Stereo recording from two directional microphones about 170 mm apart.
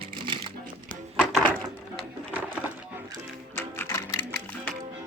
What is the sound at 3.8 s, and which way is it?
Music, 20° left (ahead or behind).